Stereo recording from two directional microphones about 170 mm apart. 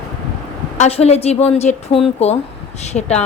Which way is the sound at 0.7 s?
40° left (ahead or behind).